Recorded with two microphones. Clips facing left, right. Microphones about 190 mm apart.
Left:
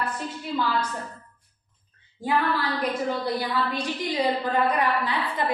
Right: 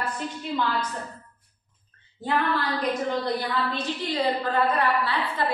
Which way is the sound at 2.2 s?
10° left (ahead or behind).